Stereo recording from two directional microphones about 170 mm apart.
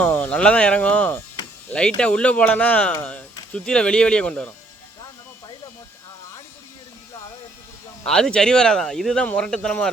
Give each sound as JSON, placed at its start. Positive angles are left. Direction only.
{"t": 0.0, "sound": "speech", "side_deg": 10}
{"t": 8.0, "sound": "speech", "side_deg": 5}